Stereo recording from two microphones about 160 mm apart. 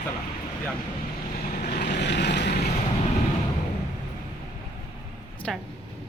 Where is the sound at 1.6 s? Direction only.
75° left (ahead or behind); by 2.5 s 90° left.